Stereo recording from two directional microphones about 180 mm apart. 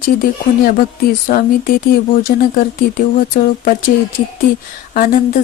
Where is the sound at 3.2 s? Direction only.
50° left (ahead or behind).